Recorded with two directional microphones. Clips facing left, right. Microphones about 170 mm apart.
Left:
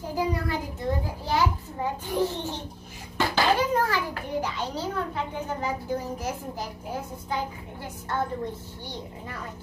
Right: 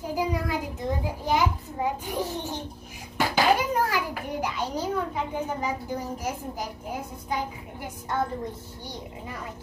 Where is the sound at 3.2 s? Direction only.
10° right (ahead or behind).